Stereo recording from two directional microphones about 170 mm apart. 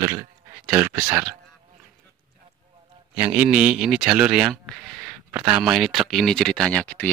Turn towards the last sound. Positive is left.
turn(degrees=10)  # may be behind; listen again after turning